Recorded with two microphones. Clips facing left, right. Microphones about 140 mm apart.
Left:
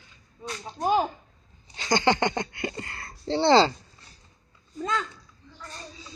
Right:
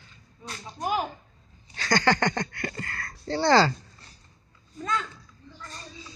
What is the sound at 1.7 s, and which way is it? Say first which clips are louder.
Speech: left 1 dB; 20° left (ahead or behind).